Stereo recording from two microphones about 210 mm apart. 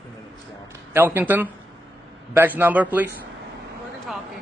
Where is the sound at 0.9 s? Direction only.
10° right (ahead or behind).